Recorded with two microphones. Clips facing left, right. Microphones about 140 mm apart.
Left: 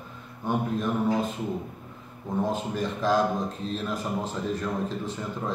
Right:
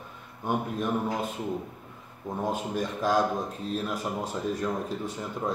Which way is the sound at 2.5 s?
10° right (ahead or behind).